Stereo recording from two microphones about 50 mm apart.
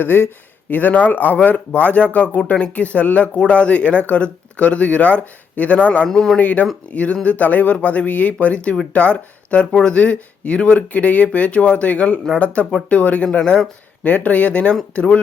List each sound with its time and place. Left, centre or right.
0.0 s speech: left
6.1 s speech: centre
6.4 s speech: left
14.0 s speech: left